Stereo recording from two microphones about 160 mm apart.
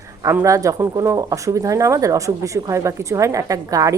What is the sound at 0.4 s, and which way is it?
Speech, 20° right (ahead or behind).